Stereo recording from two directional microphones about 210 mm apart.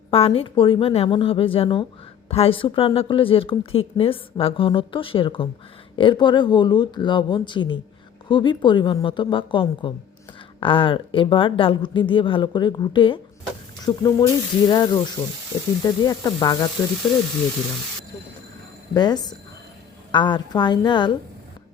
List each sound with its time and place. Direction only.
0.1 s speech: 25° left (ahead or behind)
18.9 s speech: 20° left (ahead or behind)